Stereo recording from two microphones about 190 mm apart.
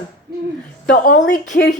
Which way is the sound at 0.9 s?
45° left (ahead or behind).